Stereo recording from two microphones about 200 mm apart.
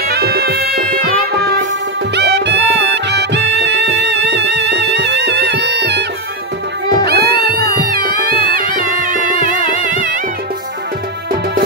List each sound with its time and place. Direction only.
0.1 s music: 50° right (ahead or behind)